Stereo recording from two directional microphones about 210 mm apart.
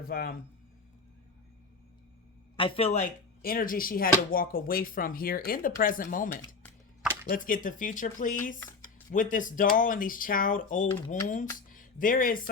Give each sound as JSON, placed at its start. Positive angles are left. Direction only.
{"t": 0.0, "sound": "speech", "side_deg": 45}
{"t": 2.6, "sound": "speech", "side_deg": 25}
{"t": 11.7, "sound": "music", "side_deg": 40}